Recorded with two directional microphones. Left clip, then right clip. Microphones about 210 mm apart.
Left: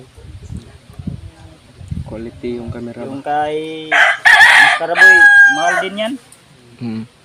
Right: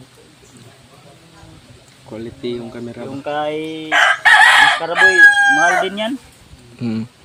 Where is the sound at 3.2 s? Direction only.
60° left (ahead or behind).